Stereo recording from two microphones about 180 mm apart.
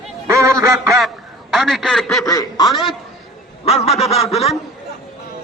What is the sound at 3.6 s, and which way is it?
Speech, 35° left (ahead or behind).